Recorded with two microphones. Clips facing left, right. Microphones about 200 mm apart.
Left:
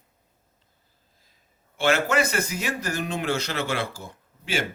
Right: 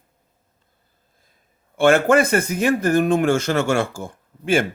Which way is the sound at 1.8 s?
50° right (ahead or behind).